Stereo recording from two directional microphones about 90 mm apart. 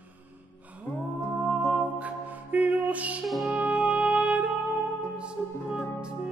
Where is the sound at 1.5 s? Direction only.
15° right (ahead or behind).